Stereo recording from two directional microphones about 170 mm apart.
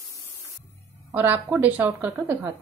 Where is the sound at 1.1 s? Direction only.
10° right (ahead or behind).